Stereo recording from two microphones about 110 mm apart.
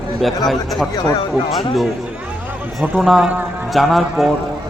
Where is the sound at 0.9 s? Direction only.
40° left (ahead or behind).